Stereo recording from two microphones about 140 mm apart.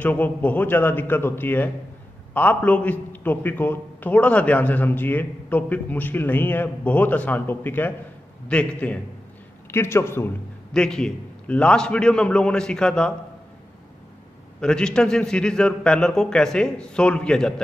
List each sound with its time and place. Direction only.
0.0 s a man's voice: 10° left (ahead or behind)
10.7 s a man's voice: 5° left (ahead or behind)
14.6 s a man's voice: 5° left (ahead or behind)